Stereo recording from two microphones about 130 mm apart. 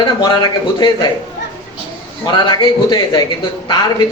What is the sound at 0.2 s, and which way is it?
Speech, 35° left (ahead or behind).